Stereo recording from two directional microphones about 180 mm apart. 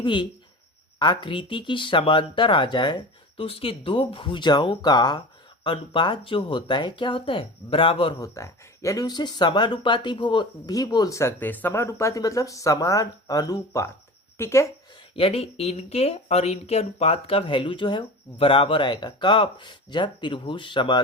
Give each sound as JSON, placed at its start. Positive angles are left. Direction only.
{"t": 0.0, "sound": "speech", "side_deg": 25}
{"t": 8.2, "sound": "speech", "side_deg": 15}
{"t": 15.1, "sound": "speech", "side_deg": 35}